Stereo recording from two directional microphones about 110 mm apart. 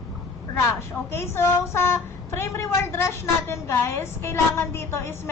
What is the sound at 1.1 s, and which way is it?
A woman's voice, 25° left (ahead or behind).